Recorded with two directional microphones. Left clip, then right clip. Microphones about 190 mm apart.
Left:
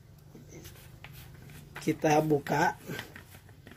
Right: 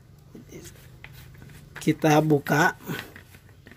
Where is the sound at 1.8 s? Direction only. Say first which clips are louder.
Right 5 dB; 35° right (ahead or behind).